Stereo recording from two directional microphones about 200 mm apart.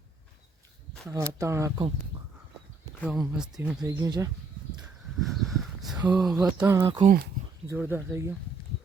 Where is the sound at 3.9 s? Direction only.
15° right (ahead or behind).